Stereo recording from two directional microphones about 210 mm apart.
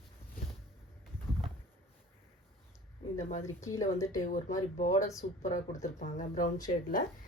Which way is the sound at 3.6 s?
15° left (ahead or behind).